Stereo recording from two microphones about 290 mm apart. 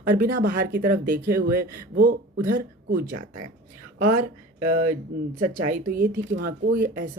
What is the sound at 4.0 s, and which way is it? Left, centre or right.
Speech, right.